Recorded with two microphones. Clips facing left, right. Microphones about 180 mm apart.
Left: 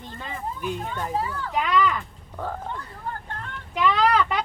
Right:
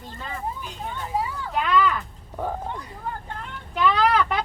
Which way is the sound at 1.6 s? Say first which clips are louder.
Right 1 dB; 10° left (ahead or behind).